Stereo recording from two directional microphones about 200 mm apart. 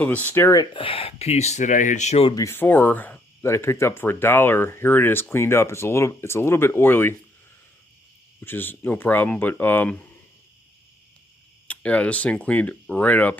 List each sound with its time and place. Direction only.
0.0 s speech: 10° left (ahead or behind); by 2.3 s 30° left (ahead or behind)
2.3 s speech: 15° left (ahead or behind)
8.4 s speech: 10° left (ahead or behind)
11.7 s speech: 5° left (ahead or behind)